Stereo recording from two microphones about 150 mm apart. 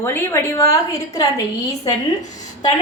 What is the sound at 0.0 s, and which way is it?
A woman's voice, 15° left (ahead or behind).